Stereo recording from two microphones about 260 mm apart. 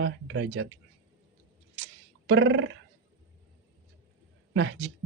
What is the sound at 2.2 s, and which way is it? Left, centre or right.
Speech, right.